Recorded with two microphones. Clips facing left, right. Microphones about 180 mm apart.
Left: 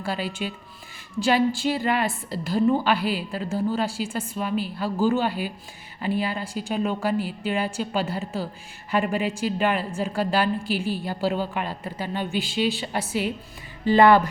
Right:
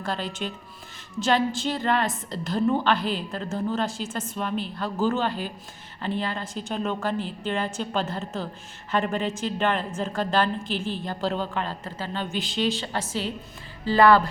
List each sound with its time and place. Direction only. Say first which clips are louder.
0.0 s a woman's voice: left 2 dB; 10° left (ahead or behind)